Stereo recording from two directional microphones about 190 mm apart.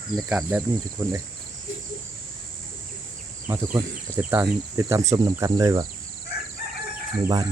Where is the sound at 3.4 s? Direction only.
15° right (ahead or behind).